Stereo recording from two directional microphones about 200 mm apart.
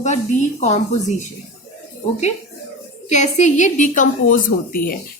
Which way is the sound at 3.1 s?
35° left (ahead or behind).